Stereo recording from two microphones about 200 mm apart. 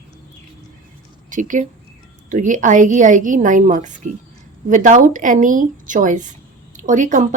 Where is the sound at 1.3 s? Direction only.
40° right (ahead or behind).